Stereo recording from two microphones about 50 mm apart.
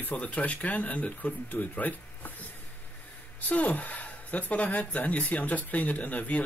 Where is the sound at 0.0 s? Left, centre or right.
Left.